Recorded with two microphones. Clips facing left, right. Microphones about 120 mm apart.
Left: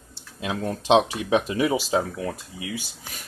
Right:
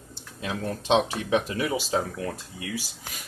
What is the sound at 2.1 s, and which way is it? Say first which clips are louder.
Speech: left 2 dB; 5° left (ahead or behind).